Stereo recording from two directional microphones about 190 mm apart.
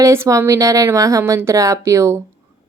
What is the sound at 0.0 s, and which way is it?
A woman's voice, 15° right (ahead or behind).